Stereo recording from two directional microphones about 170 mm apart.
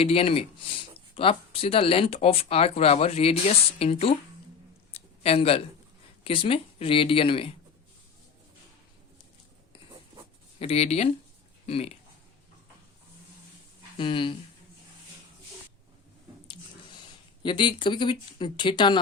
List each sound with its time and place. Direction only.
0.0 s speech: 35° left (ahead or behind)
4.9 s a sound: 35° left (ahead or behind)
6.2 s speech: 30° left (ahead or behind)
10.6 s speech: 35° left (ahead or behind)
14.0 s speech: 30° left (ahead or behind)
17.4 s speech: 30° left (ahead or behind)